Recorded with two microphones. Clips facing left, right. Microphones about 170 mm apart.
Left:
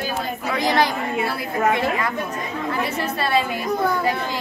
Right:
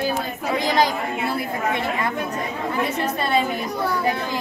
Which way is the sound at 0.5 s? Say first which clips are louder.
Even; 15° right (ahead or behind).